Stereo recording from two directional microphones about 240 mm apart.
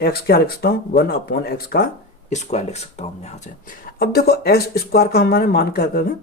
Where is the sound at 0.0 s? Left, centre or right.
Left.